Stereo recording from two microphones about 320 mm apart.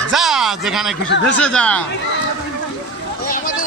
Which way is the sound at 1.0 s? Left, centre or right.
Left.